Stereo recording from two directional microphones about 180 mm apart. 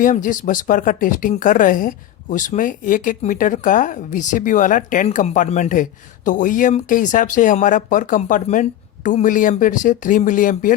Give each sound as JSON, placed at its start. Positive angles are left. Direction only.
{"t": 0.0, "sound": "speech", "side_deg": 45}